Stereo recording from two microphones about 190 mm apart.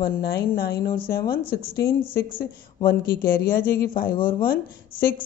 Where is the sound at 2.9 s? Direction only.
50° left (ahead or behind).